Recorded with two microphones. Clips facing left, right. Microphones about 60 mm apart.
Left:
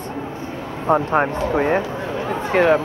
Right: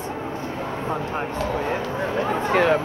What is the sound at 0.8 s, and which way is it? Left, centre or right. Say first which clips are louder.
Speech: left 12 dB; left.